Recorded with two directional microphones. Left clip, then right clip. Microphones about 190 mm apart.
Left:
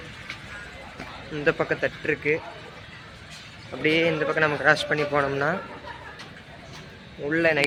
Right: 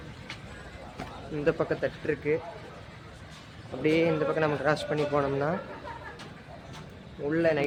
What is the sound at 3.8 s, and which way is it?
A man's voice, centre (ahead or behind).